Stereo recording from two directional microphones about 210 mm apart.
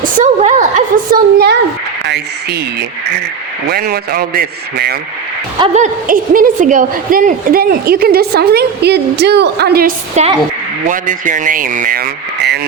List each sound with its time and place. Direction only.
0.0 s a woman's voice: 35° right (ahead or behind)
1.1 s a woman's voice: 50° right (ahead or behind)
3.7 s a woman's voice: 45° right (ahead or behind)
5.5 s a woman's voice: 30° right (ahead or behind); by 9.9 s 50° right (ahead or behind)
10.2 s speech: 30° right (ahead or behind)